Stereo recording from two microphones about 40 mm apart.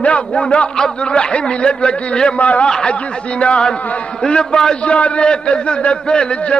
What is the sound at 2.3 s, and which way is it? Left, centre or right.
A man's voice, left.